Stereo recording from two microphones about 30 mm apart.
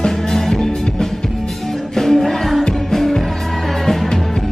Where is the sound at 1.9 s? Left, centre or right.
Centre.